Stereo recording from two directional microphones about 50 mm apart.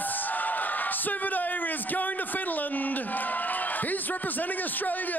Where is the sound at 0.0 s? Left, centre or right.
Left.